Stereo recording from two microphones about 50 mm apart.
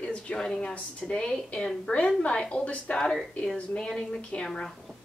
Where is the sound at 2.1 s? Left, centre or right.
Left.